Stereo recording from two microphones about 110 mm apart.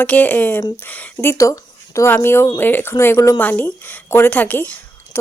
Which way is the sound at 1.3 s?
30° left (ahead or behind).